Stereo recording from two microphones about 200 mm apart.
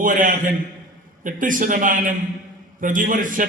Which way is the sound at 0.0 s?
40° right (ahead or behind).